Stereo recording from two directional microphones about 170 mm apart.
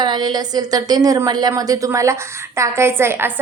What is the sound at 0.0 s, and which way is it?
A woman's voice, 25° right (ahead or behind).